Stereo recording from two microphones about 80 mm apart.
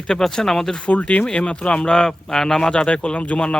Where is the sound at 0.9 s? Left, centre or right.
Centre.